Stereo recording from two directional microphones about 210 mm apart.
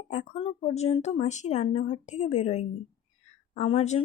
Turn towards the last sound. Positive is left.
turn(degrees=30)  # may be behind; listen again after turning